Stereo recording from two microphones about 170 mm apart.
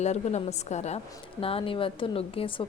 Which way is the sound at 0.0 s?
40° left (ahead or behind).